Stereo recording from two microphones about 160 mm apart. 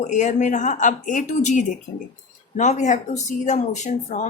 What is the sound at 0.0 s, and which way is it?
Speech, 50° left (ahead or behind).